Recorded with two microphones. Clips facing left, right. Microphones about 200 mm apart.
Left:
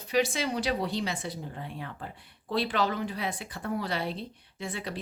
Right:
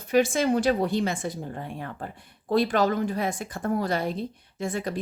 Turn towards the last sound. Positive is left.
turn(degrees=-45)  # may be behind; listen again after turning